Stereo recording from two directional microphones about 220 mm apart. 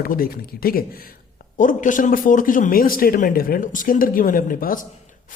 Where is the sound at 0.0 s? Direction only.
40° left (ahead or behind).